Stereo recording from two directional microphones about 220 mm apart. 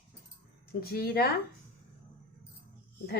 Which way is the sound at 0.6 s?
45° left (ahead or behind).